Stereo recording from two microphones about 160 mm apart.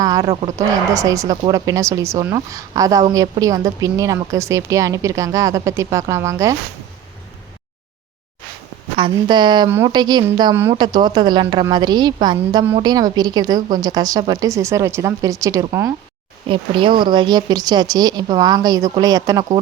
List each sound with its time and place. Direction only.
0.0 s a woman's voice: 25° right (ahead or behind)
9.0 s a woman's voice: 30° right (ahead or behind)
16.5 s a woman's voice: 30° right (ahead or behind)